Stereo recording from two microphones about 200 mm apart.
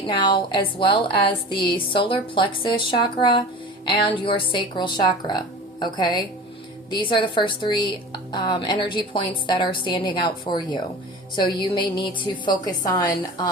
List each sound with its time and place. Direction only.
0.3 s a woman's voice: 25° left (ahead or behind)